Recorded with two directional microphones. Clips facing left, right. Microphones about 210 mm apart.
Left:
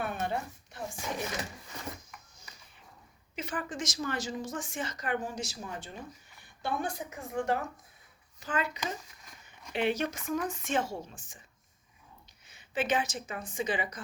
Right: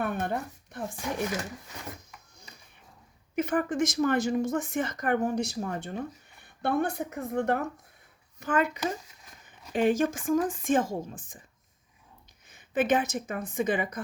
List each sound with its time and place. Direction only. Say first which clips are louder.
0.0 s speech: right 3 dB; 55° right (ahead or behind)
3.3 s a woman's voice: right 10 dB; 55° right (ahead or behind)
12.5 s a woman's voice: right 6 dB; 50° right (ahead or behind)